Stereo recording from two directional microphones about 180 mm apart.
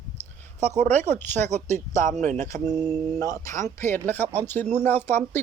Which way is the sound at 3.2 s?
20° left (ahead or behind).